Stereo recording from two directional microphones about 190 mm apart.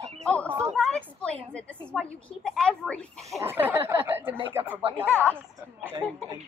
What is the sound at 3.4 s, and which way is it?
Speech, 10° right (ahead or behind).